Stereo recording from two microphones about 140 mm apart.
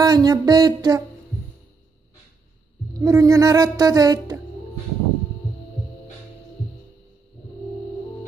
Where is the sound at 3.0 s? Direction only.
25° right (ahead or behind).